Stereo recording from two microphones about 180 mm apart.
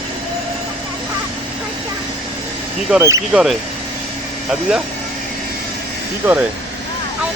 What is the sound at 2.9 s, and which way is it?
Speech, 15° right (ahead or behind).